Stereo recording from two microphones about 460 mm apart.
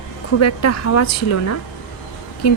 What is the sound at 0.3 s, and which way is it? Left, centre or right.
Speech, left.